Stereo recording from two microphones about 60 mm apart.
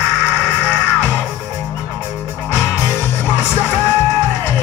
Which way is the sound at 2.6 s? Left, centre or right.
Left.